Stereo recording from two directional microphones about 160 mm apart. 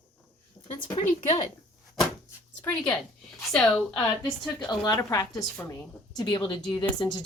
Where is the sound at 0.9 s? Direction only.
40° left (ahead or behind).